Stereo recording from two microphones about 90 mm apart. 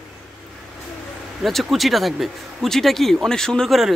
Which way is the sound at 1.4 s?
Centre (ahead or behind).